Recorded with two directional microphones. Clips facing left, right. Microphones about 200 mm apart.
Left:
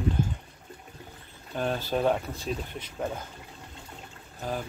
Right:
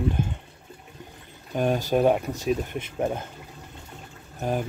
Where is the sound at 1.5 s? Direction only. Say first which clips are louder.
Right 6 dB; 15° right (ahead or behind).